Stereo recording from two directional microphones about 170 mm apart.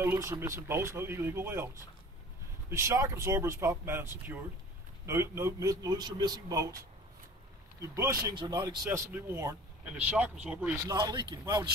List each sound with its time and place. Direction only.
0.0 s speech: 15° right (ahead or behind)
2.7 s a man's voice: 15° right (ahead or behind)
7.9 s speech: 15° right (ahead or behind)
10.9 s a man's voice: 25° right (ahead or behind)